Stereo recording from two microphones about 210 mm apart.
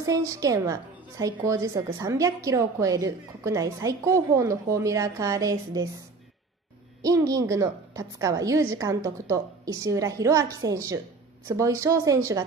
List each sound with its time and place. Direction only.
0.0 s a woman's voice: 15° right (ahead or behind)
7.0 s a woman's voice: 15° right (ahead or behind)